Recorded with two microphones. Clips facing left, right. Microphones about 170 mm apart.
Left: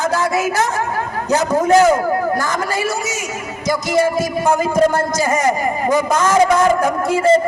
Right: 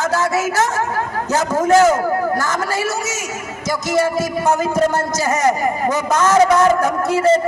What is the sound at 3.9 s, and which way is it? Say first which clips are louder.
A man's voice: left 1 dB; 10° left (ahead or behind).